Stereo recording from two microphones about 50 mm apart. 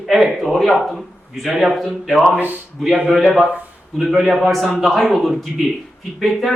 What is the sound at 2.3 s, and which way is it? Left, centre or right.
Speech, right.